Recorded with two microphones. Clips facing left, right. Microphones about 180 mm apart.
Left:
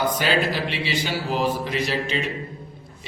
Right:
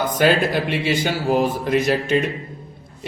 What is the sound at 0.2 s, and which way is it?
Speech, 50° right (ahead or behind).